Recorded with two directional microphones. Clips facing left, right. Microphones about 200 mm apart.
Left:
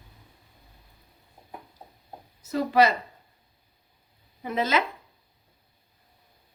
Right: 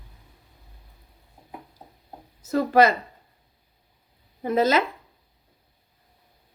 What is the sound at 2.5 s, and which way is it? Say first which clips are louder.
Speech: right 3 dB; 50° right (ahead or behind).